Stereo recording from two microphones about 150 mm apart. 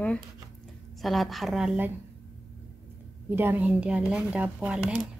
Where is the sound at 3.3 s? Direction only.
15° right (ahead or behind).